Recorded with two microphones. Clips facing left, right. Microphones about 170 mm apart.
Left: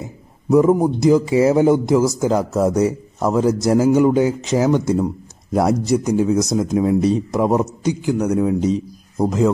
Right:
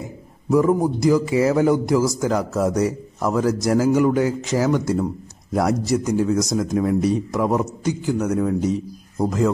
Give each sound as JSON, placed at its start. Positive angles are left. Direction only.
{"t": 0.5, "sound": "a man's voice", "side_deg": 20}